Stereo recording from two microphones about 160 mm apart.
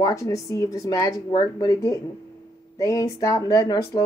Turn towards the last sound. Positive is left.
turn(degrees=25)  # may be behind; listen again after turning